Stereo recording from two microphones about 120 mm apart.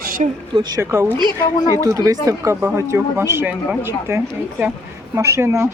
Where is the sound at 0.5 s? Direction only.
35° right (ahead or behind).